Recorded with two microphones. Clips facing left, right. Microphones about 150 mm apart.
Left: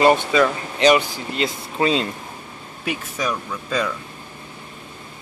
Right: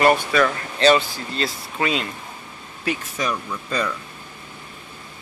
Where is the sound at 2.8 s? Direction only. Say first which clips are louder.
Even; 10° left (ahead or behind).